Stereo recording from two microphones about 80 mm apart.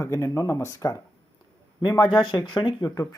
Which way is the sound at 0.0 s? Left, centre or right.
Left.